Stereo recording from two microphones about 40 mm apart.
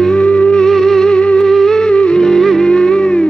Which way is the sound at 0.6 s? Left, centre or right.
Centre.